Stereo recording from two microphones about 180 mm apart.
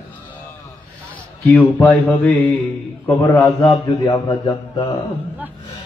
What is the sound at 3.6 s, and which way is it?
A man's voice, 25° left (ahead or behind).